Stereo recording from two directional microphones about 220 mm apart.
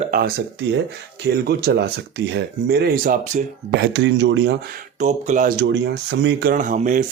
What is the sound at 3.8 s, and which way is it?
Speech, 55° right (ahead or behind).